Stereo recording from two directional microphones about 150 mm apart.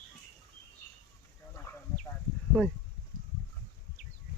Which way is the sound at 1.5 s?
15° left (ahead or behind).